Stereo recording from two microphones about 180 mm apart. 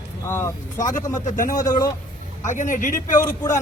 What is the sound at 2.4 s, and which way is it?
Speech, 45° left (ahead or behind).